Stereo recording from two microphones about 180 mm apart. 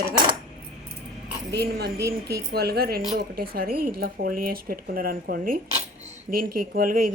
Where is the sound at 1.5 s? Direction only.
65° right (ahead or behind).